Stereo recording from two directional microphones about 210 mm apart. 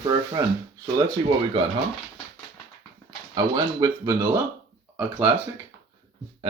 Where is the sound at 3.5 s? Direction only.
20° right (ahead or behind).